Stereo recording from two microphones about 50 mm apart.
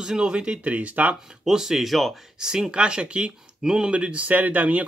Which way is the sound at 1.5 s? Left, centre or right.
Centre.